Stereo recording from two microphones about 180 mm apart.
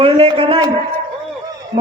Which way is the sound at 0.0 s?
30° right (ahead or behind).